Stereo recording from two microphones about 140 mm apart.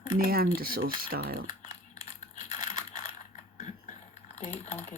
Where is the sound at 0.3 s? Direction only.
90° right.